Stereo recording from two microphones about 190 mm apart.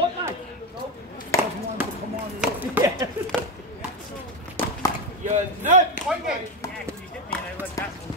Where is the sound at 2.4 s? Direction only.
10° right (ahead or behind).